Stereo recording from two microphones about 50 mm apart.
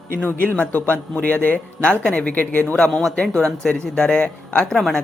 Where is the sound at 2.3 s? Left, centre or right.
Left.